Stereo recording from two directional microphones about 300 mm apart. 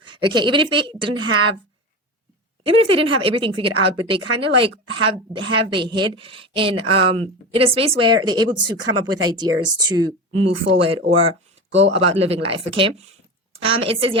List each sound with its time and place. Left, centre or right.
0.0 s speech: centre
2.6 s speech: centre